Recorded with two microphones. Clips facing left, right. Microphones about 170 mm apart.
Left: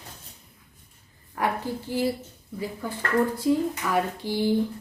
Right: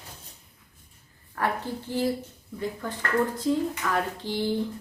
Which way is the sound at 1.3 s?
15° left (ahead or behind).